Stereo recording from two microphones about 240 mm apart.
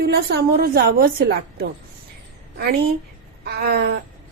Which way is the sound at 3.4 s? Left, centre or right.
Right.